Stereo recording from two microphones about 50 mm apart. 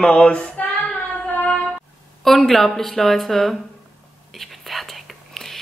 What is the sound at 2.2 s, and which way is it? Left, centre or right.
A woman's voice, centre.